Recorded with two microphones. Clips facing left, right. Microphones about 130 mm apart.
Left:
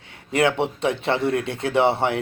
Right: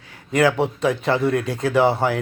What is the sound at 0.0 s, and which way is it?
A man's voice, 25° left (ahead or behind).